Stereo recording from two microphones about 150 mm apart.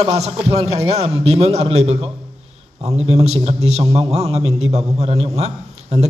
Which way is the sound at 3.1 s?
45° right (ahead or behind).